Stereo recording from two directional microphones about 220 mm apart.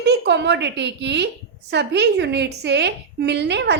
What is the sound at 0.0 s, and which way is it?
A woman's voice, 50° right (ahead or behind).